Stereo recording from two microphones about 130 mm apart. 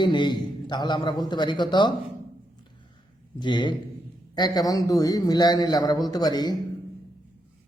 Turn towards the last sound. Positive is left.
turn(degrees=30)  # may be behind; listen again after turning